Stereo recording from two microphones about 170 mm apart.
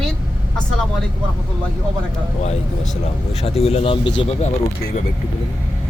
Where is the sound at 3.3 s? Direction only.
35° left (ahead or behind).